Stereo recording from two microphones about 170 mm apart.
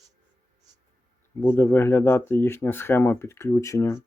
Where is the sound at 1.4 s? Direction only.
10° left (ahead or behind).